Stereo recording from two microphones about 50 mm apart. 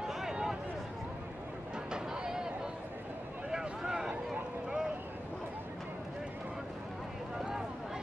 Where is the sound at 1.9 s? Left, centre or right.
Centre.